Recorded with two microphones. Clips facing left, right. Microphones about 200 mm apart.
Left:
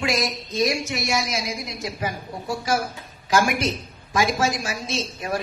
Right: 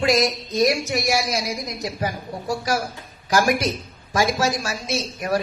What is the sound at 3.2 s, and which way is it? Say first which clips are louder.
Speech: right 1 dB; 40° right (ahead or behind).